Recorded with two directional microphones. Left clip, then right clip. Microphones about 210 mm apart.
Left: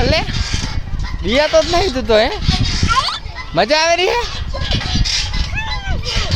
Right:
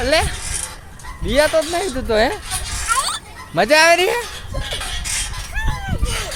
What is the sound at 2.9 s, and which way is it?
Children playing, 5° right (ahead or behind).